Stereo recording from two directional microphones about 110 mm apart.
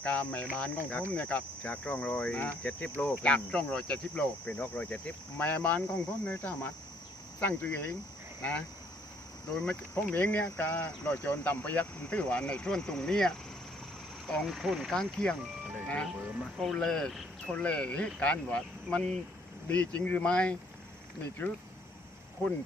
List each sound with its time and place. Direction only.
0.0 s speech: 10° left (ahead or behind)
14.4 s speech: 5° right (ahead or behind)
14.9 s speech: 10° left (ahead or behind)